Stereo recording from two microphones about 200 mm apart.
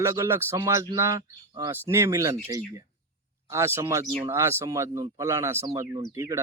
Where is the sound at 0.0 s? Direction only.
15° right (ahead or behind).